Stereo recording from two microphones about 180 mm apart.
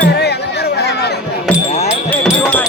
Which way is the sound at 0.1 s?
65° left (ahead or behind).